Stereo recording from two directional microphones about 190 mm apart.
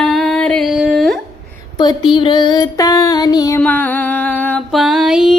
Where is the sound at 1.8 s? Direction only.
25° left (ahead or behind).